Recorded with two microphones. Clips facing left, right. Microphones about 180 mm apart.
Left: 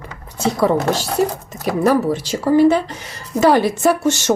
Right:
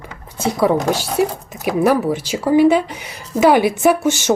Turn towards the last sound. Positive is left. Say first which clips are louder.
# right 1 dB
turn(degrees=-10)  # may be behind; listen again after turning